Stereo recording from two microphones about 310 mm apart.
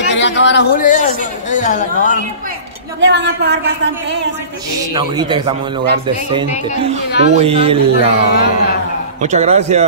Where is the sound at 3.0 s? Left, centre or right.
Right.